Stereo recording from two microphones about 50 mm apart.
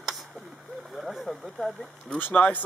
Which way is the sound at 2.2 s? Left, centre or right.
Left.